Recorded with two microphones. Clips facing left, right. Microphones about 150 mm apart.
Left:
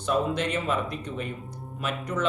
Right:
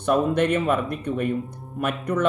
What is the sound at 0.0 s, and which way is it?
Speech, 60° right (ahead or behind).